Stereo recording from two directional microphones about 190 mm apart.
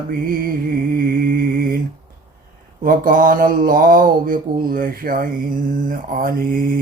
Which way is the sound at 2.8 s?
45° right (ahead or behind).